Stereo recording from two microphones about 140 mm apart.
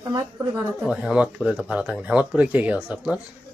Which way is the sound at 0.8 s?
5° right (ahead or behind).